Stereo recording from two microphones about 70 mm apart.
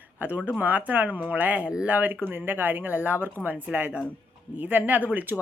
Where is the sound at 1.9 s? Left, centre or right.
Right.